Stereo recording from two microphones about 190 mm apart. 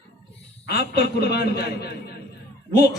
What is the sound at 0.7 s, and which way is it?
A man's voice, 55° left (ahead or behind).